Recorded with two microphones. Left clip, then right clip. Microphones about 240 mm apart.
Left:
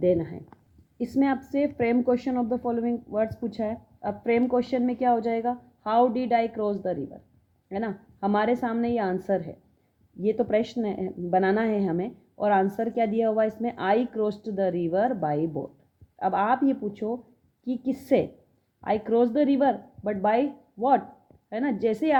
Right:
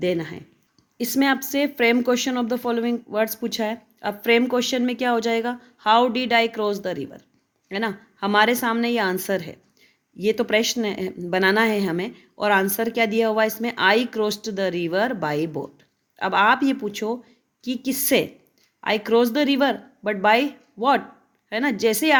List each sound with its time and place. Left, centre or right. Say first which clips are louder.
0.0 s speech: left 1 dB; right
1.2 s speech: right 4 dB; right
6.6 s speech: right 4 dB; right
7.7 s speech: right 5 dB; right
21.5 s speech: right 5 dB; right